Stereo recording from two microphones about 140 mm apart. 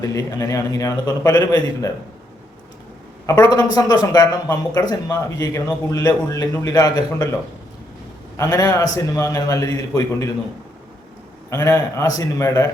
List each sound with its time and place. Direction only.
0.0 s speech: 20° left (ahead or behind)
3.2 s speech: 20° left (ahead or behind)
8.4 s speech: 25° left (ahead or behind)
11.5 s speech: 20° left (ahead or behind)